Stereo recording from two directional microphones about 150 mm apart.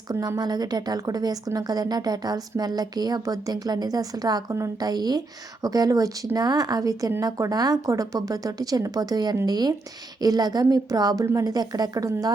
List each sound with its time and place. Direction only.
0.1 s a woman's voice: 25° right (ahead or behind)